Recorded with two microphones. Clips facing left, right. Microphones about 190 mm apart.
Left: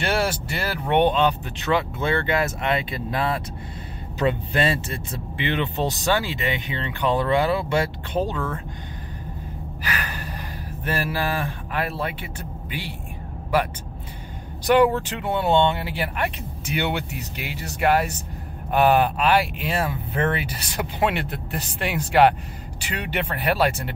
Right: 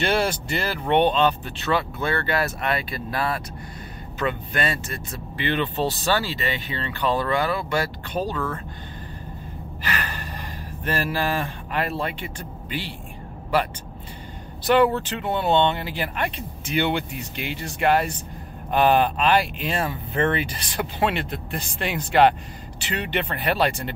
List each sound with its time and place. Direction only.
0.0 s speech: 10° left (ahead or behind)
9.8 s gasp: 10° left (ahead or behind)
10.9 s speech: 10° left (ahead or behind)
14.7 s speech: 10° left (ahead or behind)